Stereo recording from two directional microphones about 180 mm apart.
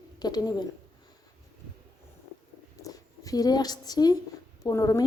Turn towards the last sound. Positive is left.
turn(degrees=20)  # may be behind; listen again after turning